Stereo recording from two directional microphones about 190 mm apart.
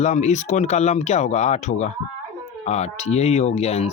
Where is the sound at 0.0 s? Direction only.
35° left (ahead or behind).